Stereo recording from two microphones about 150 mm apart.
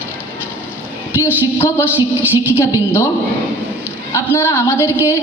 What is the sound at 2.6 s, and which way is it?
Speech, 15° left (ahead or behind).